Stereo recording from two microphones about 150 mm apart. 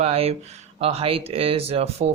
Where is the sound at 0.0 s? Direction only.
40° right (ahead or behind).